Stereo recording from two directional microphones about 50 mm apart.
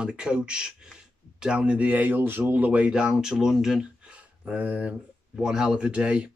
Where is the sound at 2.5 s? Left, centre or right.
Right.